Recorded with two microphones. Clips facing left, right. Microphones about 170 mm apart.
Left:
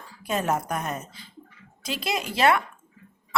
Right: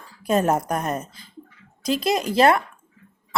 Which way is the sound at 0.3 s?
40° right (ahead or behind).